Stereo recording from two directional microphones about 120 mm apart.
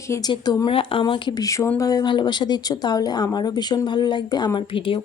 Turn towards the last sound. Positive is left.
turn(degrees=45)  # may be behind; listen again after turning